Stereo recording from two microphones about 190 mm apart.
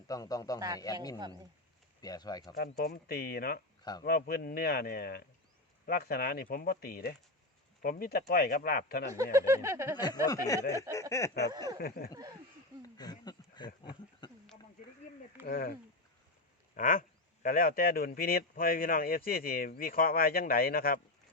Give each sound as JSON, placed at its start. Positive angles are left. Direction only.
{"t": 0.1, "sound": "speech", "side_deg": 20}
{"t": 1.2, "sound": "speech", "side_deg": -20}
{"t": 2.0, "sound": "speech", "side_deg": 20}
{"t": 2.6, "sound": "speech", "side_deg": 55}
{"t": 9.1, "sound": "a sound", "side_deg": -15}
{"t": 10.2, "sound": "speech", "side_deg": 20}
{"t": 11.1, "sound": "a sound", "side_deg": 15}
{"t": 11.8, "sound": "speech", "side_deg": 50}
{"t": 12.8, "sound": "a sound", "side_deg": 20}
{"t": 15.4, "sound": "speech", "side_deg": 50}